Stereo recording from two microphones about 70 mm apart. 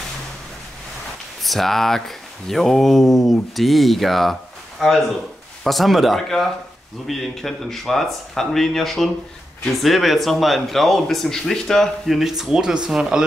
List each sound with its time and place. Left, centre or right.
1.4 s speech: centre
12.2 s speech: centre